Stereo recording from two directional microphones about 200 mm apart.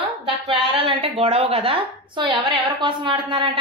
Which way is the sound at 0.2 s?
25° right (ahead or behind).